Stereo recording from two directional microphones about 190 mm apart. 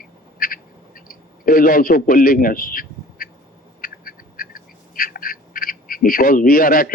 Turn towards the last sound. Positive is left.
turn(degrees=50)  # may be behind; listen again after turning